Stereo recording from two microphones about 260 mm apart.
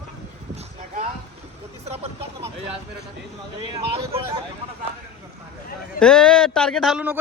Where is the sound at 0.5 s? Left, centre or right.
Right.